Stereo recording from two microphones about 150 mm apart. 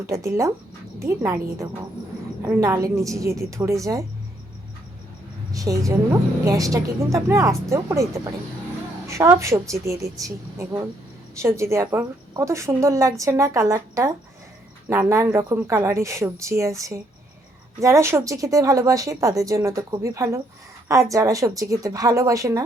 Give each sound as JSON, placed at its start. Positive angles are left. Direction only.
{"t": 0.0, "sound": "a woman's voice", "side_deg": -20}
{"t": 5.5, "sound": "a woman's voice", "side_deg": -20}